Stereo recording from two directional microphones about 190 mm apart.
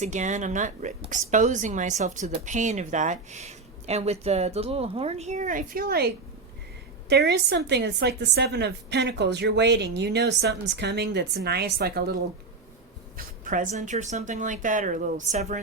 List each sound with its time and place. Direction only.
0.0 s speech: 40° right (ahead or behind)
7.1 s a woman's voice: 60° right (ahead or behind)
13.1 s speech: 45° right (ahead or behind)